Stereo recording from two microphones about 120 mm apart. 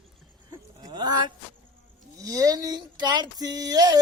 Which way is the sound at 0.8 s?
35° right (ahead or behind).